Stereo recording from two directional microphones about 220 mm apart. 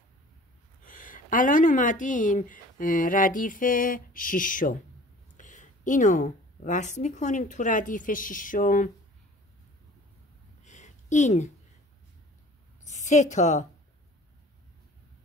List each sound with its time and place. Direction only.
0.9 s speech: 35° left (ahead or behind)
10.6 s a sound: 35° left (ahead or behind)
12.9 s a woman's voice: 35° left (ahead or behind)